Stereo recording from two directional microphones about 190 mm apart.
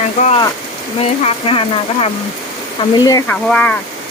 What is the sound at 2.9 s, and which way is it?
Speech, 20° left (ahead or behind).